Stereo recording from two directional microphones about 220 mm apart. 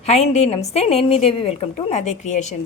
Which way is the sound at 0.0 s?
30° left (ahead or behind).